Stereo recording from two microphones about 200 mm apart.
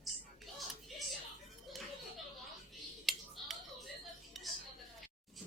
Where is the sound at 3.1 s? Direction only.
Centre (ahead or behind).